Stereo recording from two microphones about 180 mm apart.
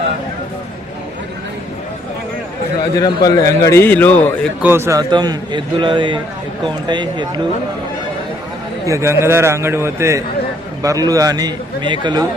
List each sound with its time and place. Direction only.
3.0 s a man's voice: 20° left (ahead or behind)
4.6 s a man's voice: 15° right (ahead or behind)
8.9 s a man's voice: 15° right (ahead or behind)